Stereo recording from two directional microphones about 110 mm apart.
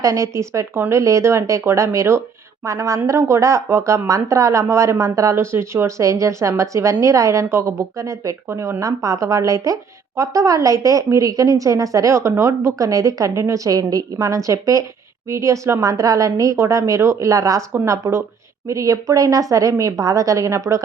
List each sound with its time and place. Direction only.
0.0 s a woman's voice: 30° right (ahead or behind)